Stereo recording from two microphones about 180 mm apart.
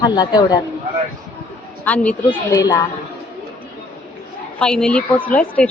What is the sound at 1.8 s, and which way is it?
Speech, 10° left (ahead or behind).